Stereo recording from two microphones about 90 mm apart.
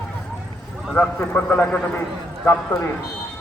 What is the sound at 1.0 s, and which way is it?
Speech, 15° left (ahead or behind).